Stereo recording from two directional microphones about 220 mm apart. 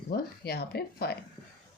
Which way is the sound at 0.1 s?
45° left (ahead or behind).